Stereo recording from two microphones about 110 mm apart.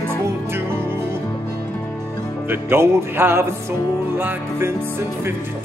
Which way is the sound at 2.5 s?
20° right (ahead or behind).